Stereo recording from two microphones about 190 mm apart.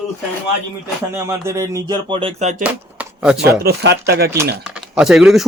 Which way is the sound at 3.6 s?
60° right (ahead or behind).